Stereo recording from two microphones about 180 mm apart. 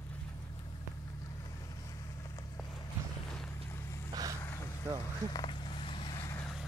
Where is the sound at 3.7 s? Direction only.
15° left (ahead or behind).